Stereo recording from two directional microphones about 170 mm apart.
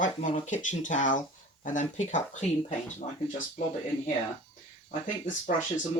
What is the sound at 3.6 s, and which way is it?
Speech, 45° left (ahead or behind).